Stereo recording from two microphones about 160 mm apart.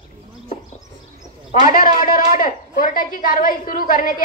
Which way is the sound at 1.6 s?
60° left (ahead or behind).